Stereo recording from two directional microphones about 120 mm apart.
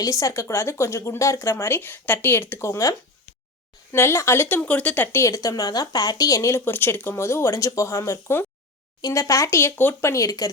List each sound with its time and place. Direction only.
0.0 s speech: 25° left (ahead or behind)
3.9 s speech: 20° left (ahead or behind)
5.2 s speech: 25° left (ahead or behind)